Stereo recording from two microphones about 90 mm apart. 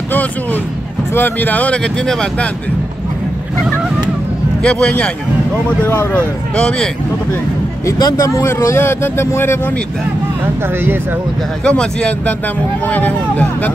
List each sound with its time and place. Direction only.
0.1 s speech: 20° left (ahead or behind)
4.6 s speech: 10° left (ahead or behind)
5.9 s speech: 25° left (ahead or behind)
6.5 s speech: 10° left (ahead or behind)
7.8 s speech: 35° left (ahead or behind)
11.6 s speech: 10° left (ahead or behind)